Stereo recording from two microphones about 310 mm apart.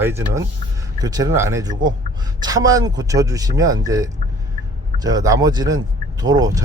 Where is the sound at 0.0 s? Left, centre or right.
Centre.